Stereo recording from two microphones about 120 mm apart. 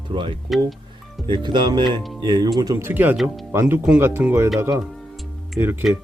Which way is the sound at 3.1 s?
Centre (ahead or behind).